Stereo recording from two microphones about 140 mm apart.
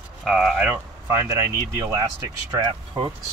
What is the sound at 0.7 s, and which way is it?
Speech, 20° right (ahead or behind).